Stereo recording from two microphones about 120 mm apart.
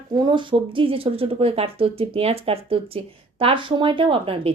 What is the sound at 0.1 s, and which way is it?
Speech, 40° right (ahead or behind).